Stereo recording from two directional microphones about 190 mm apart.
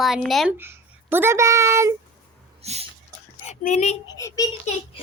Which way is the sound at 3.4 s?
40° left (ahead or behind).